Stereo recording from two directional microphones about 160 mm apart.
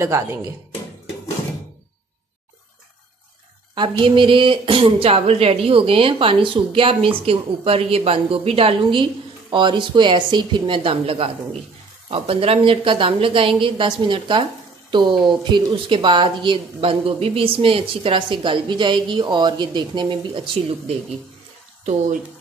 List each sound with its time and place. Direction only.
0.0 s speech: 15° right (ahead or behind)
3.7 s a woman's voice: 30° right (ahead or behind)